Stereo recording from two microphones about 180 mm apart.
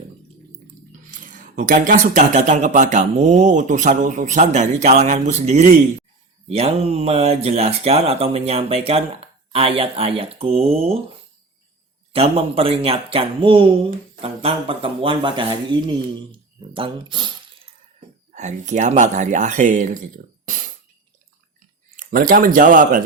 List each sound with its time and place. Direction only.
1.1 s speech: 45° right (ahead or behind)
12.1 s speech: 35° right (ahead or behind)
18.3 s speech: 40° right (ahead or behind)
20.4 s a sound: 45° right (ahead or behind)
21.9 s speech: 50° right (ahead or behind)